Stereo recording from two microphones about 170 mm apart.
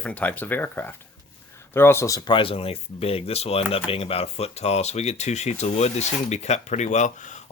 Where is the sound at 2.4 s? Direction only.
35° left (ahead or behind).